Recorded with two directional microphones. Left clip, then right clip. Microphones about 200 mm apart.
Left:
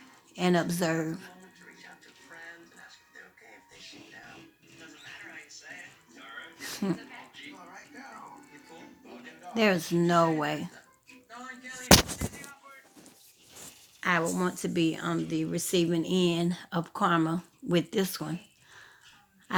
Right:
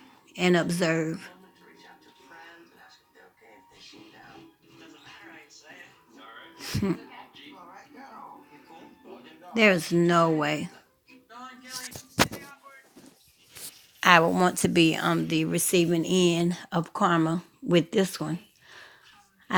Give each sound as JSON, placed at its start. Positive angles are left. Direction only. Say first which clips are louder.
{"t": 0.3, "sound": "speech", "louder": "right 3 dB", "side_deg": -15}
{"t": 6.6, "sound": "a sound", "louder": "right 4 dB", "side_deg": -10}
{"t": 9.6, "sound": "speech", "louder": "right 5 dB", "side_deg": -15}
{"t": 14.0, "sound": "a woman's voice", "louder": "right 9 dB", "side_deg": -50}